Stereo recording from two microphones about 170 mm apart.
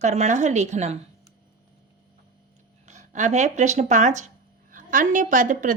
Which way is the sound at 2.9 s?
45° right (ahead or behind).